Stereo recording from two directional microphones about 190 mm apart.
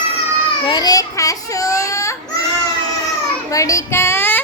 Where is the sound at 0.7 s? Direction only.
20° left (ahead or behind).